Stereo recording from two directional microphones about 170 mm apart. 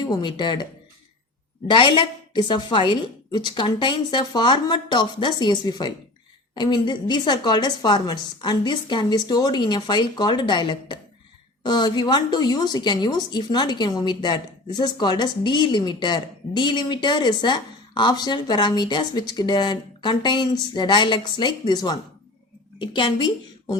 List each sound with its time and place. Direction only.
0.0 s a woman's voice: 25° left (ahead or behind)